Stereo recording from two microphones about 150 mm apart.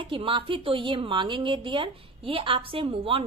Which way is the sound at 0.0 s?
35° right (ahead or behind).